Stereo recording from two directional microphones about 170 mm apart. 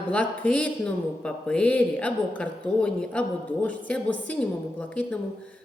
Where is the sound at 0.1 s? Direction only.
10° left (ahead or behind).